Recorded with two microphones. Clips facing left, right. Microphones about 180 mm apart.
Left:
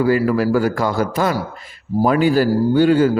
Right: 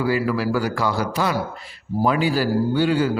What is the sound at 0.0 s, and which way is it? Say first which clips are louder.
A man's voice: left 5 dB; 50° left (ahead or behind).